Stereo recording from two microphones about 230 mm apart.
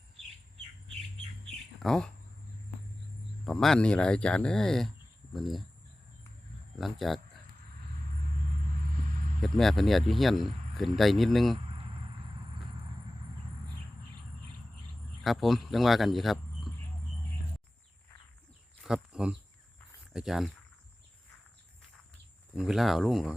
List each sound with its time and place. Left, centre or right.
1.8 s speech: centre
3.4 s speech: centre
6.7 s speech: centre
9.4 s speech: centre
11.5 s a sound: right
15.2 s speech: centre
18.8 s speech: centre
22.5 s speech: centre